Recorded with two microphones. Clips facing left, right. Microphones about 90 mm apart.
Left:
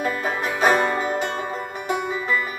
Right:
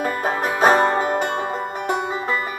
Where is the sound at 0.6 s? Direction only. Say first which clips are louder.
Right 3 dB; 40° right (ahead or behind).